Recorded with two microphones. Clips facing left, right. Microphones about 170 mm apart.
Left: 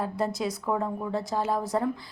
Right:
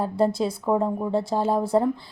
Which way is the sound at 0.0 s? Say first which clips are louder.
Right 6 dB; 30° right (ahead or behind).